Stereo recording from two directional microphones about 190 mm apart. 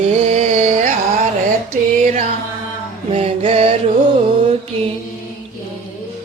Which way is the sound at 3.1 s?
30° right (ahead or behind).